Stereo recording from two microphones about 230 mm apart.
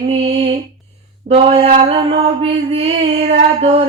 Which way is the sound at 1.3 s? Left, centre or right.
Right.